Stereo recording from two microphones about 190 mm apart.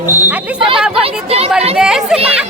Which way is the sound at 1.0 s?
30° right (ahead or behind).